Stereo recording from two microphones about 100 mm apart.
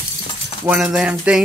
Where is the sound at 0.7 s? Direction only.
5° right (ahead or behind).